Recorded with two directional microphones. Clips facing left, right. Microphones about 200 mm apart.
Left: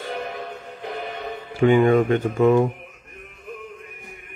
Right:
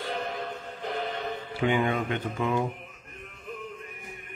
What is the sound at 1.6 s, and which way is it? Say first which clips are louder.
A man's voice: left 10 dB; 45° left (ahead or behind).